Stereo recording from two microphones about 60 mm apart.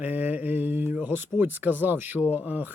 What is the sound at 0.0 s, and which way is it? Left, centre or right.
Speech, right.